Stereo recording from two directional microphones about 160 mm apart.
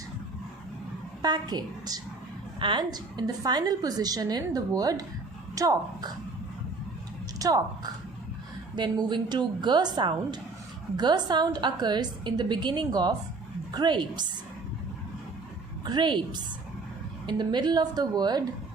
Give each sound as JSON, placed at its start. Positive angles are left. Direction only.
{"t": 1.2, "sound": "a woman's voice", "side_deg": -25}
{"t": 7.3, "sound": "speech", "side_deg": -25}
{"t": 8.7, "sound": "a woman's voice", "side_deg": -30}
{"t": 15.8, "sound": "a woman's voice", "side_deg": -25}